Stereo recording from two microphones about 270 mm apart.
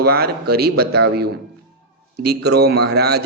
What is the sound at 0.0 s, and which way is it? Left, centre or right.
A man's voice, right.